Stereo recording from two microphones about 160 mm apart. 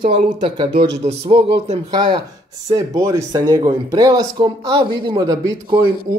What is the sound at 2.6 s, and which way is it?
Speech, 20° right (ahead or behind).